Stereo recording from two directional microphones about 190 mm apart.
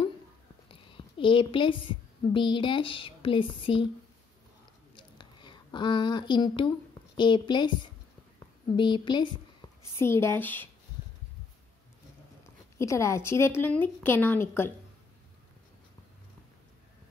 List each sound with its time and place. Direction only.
0.7 s a woman's voice: 25° left (ahead or behind)
4.9 s a sound: 25° left (ahead or behind)
7.2 s a woman's voice: 25° left (ahead or behind)
9.9 s speech: 15° left (ahead or behind)
12.7 s speech: 15° left (ahead or behind)